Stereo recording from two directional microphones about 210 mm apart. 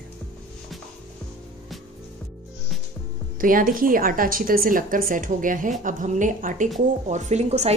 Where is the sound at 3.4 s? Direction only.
40° right (ahead or behind).